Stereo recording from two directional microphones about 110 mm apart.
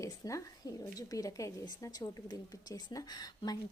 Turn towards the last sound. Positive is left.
turn(degrees=40)  # may be behind; listen again after turning